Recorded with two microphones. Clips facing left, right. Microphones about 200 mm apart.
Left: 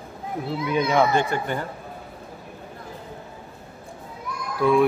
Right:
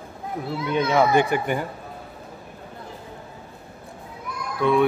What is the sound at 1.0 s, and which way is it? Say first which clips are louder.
Speech: right 2 dB; 15° right (ahead or behind).